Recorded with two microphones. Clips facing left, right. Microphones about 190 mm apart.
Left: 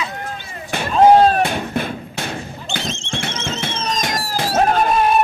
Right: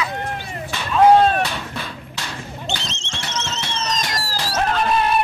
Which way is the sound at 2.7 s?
50° left (ahead or behind).